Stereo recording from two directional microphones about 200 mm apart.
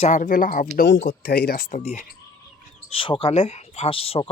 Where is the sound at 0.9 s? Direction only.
55° left (ahead or behind); by 2.0 s 35° left (ahead or behind).